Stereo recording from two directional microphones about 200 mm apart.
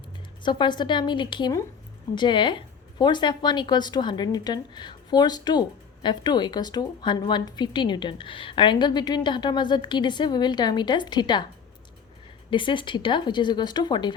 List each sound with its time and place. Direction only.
0.4 s a woman's voice: 20° left (ahead or behind)
12.5 s a woman's voice: 25° left (ahead or behind)